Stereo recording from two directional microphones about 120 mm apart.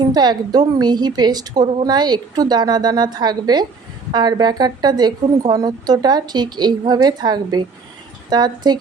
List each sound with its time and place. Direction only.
0.0 s a woman's voice: 35° right (ahead or behind)